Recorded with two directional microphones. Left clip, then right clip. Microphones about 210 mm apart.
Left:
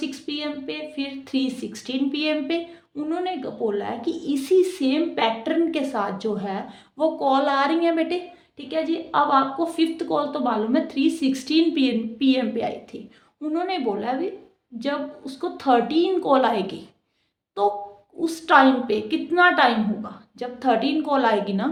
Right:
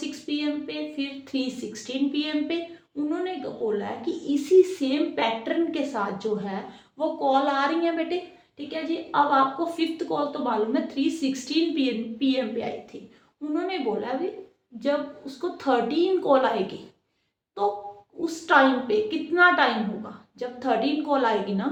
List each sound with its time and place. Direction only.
0.1 s a woman's voice: 50° left (ahead or behind)